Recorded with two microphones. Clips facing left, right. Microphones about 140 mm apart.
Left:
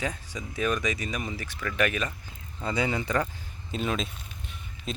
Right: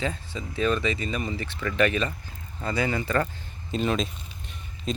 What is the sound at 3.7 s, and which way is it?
Speech, centre (ahead or behind).